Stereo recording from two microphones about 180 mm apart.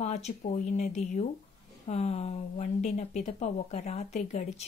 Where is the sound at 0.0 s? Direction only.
35° left (ahead or behind).